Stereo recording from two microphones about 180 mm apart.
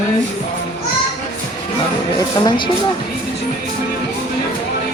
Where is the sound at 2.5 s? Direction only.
25° left (ahead or behind).